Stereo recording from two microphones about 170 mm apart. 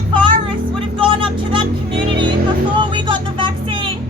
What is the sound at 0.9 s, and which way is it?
Vehicle, 30° right (ahead or behind).